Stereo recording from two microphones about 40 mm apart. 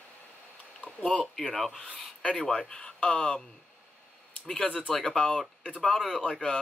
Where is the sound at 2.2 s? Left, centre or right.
Centre.